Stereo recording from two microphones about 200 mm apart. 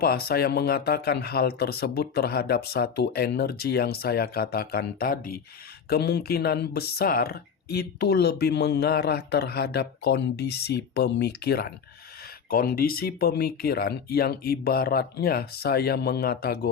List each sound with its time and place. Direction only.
0.0 s speech: 50° left (ahead or behind)